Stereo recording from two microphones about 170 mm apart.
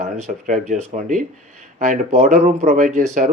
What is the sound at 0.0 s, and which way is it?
Speech, 50° right (ahead or behind).